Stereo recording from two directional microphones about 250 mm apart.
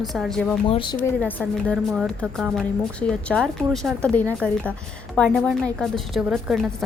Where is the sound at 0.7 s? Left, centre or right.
Centre.